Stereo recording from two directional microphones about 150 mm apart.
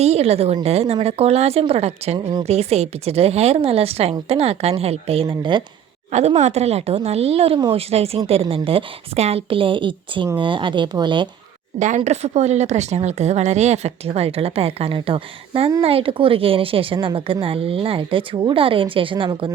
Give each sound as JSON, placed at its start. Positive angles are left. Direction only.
{"t": 0.0, "sound": "a woman's voice", "side_deg": -45}
{"t": 6.1, "sound": "a woman's voice", "side_deg": -50}
{"t": 11.8, "sound": "a woman's voice", "side_deg": -55}